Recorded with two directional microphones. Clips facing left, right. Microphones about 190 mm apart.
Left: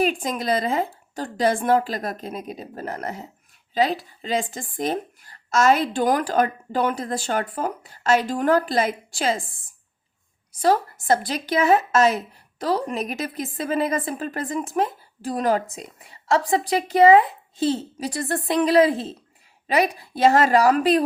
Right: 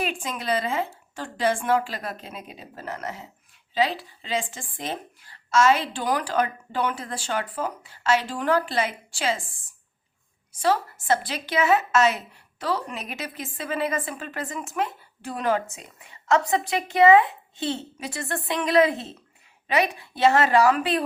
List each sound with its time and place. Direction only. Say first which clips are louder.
0.0 s a woman's voice: left 6 dB; 40° left (ahead or behind)
10.6 s a woman's voice: left 3 dB; 40° left (ahead or behind)